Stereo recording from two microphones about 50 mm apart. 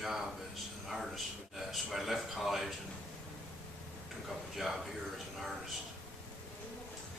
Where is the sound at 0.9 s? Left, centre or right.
Centre.